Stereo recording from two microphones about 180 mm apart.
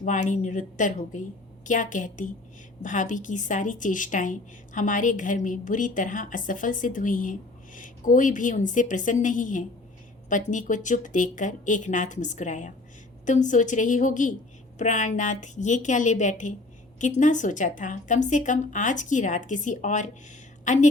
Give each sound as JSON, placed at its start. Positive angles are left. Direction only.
{"t": 0.0, "sound": "a woman's voice", "side_deg": 45}